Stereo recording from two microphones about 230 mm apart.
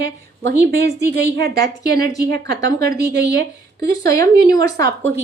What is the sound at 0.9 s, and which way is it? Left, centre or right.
A woman's voice, right.